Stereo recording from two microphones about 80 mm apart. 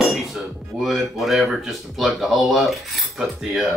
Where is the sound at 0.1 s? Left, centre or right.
Centre.